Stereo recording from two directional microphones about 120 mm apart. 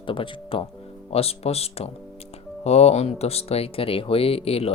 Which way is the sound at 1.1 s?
55° left (ahead or behind).